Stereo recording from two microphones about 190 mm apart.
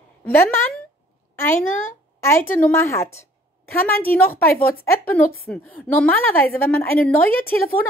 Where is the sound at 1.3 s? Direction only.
10° left (ahead or behind).